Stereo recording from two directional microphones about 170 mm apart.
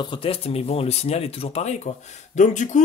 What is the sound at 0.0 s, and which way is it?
Speech, 30° left (ahead or behind).